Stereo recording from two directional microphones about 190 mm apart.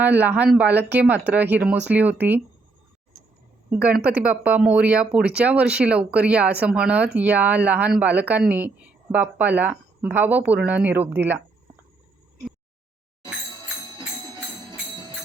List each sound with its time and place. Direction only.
0.0 s speech: 10° right (ahead or behind)
3.7 s speech: 5° right (ahead or behind)
13.2 s music: 20° left (ahead or behind)